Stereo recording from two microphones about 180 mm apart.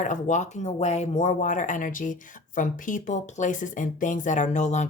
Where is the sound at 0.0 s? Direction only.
45° left (ahead or behind).